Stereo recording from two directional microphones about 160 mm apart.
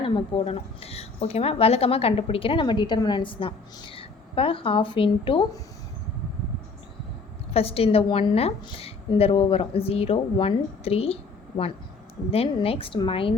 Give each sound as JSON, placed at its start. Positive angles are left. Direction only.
{"t": 0.0, "sound": "a woman's voice", "side_deg": 35}
{"t": 7.5, "sound": "a woman's voice", "side_deg": 40}